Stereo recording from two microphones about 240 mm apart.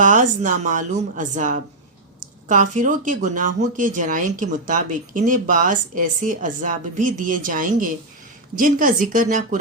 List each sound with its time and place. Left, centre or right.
0.0 s speech: right